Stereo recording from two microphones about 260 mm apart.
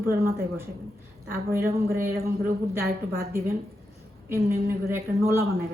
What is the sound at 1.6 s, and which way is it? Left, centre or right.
Speech, right.